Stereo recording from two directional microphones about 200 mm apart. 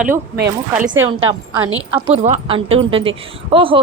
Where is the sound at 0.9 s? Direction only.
20° right (ahead or behind).